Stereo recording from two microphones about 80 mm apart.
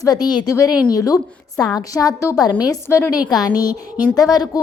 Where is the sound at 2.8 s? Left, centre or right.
Left.